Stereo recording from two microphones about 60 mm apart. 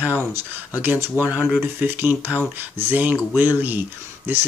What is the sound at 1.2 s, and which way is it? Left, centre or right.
Speech, centre.